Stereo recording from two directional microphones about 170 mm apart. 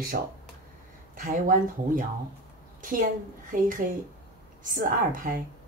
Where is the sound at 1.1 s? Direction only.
50° right (ahead or behind).